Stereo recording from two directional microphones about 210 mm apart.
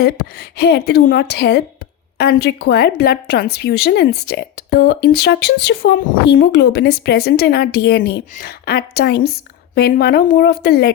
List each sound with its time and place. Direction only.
0.0 s a woman's voice: 50° left (ahead or behind)